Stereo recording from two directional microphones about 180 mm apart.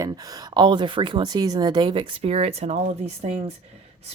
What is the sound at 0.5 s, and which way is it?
Speech, 25° right (ahead or behind).